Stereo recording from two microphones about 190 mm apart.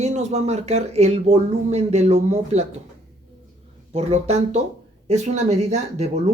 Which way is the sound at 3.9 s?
35° right (ahead or behind).